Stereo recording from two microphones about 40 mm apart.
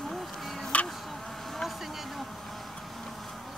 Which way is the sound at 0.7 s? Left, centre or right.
Left.